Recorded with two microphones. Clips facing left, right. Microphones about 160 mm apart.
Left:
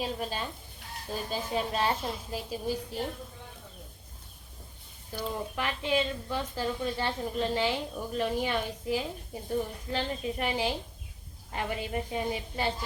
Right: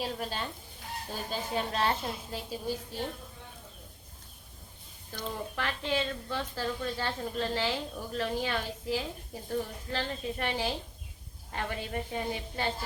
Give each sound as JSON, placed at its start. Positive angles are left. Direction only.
{"t": 0.0, "sound": "a woman's voice", "side_deg": 0}
{"t": 5.1, "sound": "speech", "side_deg": 10}